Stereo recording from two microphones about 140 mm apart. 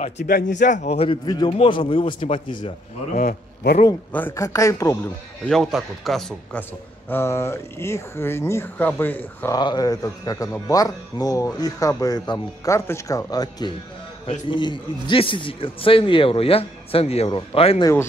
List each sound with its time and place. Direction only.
0.0 s speech: 65° left (ahead or behind)
0.9 s a man's voice: 40° left (ahead or behind)
3.2 s a man's voice: 90° left
4.1 s speech: 15° left (ahead or behind)
5.4 s speech: centre (ahead or behind)
7.1 s speech: 15° left (ahead or behind)
9.6 s a man's voice: 30° left (ahead or behind)